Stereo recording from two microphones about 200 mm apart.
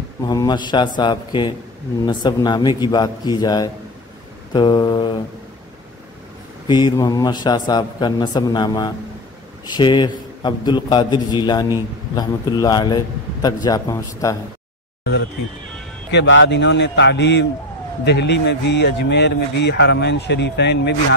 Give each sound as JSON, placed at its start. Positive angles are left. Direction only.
{"t": 0.2, "sound": "a man's voice", "side_deg": 20}
{"t": 6.7, "sound": "a man's voice", "side_deg": 20}
{"t": 16.1, "sound": "speech", "side_deg": 65}